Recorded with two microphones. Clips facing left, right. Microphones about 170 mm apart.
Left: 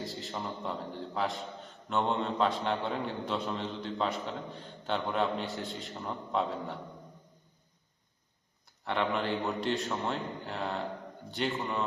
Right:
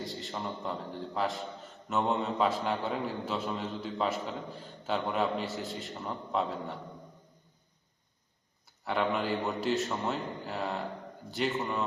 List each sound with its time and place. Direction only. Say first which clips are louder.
0.0 s a man's voice: even; centre (ahead or behind)
8.8 s a man's voice: right 1 dB; 5° right (ahead or behind)